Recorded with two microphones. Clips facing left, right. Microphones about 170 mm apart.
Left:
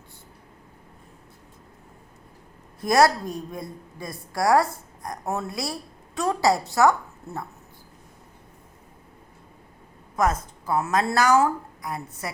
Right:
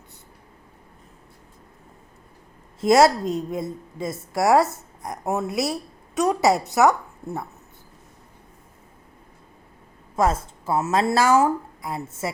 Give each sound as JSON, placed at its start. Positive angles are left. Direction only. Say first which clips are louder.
{"t": 2.8, "sound": "a woman's voice", "louder": "right 3 dB", "side_deg": -25}
{"t": 10.2, "sound": "a woman's voice", "louder": "right 2 dB", "side_deg": -25}